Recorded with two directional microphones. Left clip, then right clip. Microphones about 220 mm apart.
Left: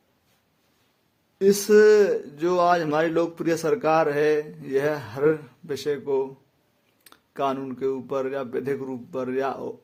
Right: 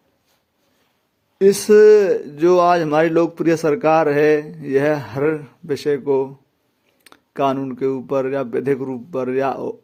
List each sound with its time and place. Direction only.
1.4 s speech: 30° right (ahead or behind)